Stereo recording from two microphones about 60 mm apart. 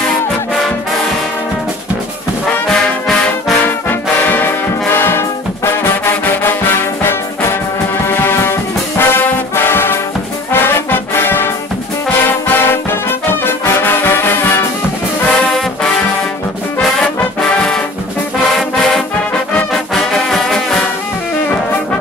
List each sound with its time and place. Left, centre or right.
4.3 s brass instrument: left
12.3 s music: left
13.5 s brass instrument: left
15.3 s brass instrument: centre
17.5 s brass instrument: centre
18.5 s music: centre
19.7 s brass instrument: centre